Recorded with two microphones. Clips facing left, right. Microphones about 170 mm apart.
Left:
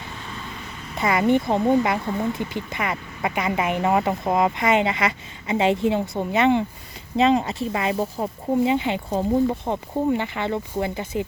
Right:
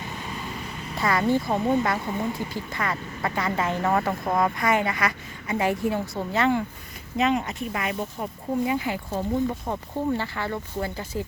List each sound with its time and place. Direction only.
0.9 s speech: 20° left (ahead or behind)
10.1 s speech: 20° left (ahead or behind)